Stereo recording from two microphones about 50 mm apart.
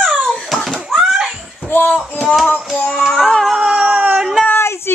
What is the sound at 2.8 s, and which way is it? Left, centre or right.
Child singing, centre.